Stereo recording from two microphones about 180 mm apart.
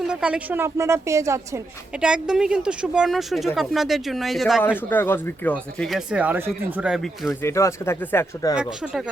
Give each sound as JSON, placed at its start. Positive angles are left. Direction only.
{"t": 0.0, "sound": "a woman's voice", "side_deg": -5}
{"t": 2.0, "sound": "speech", "side_deg": -5}
{"t": 4.9, "sound": "speech", "side_deg": 10}
{"t": 7.4, "sound": "speech", "side_deg": 15}